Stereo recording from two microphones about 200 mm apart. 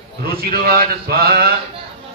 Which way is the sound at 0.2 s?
50° right (ahead or behind).